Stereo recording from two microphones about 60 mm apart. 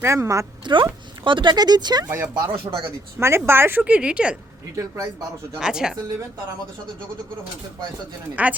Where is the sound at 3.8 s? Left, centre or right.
Centre.